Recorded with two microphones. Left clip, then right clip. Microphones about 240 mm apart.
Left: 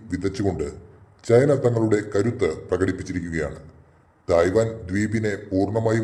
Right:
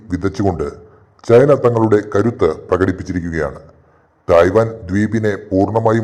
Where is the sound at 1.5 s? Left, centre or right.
Right.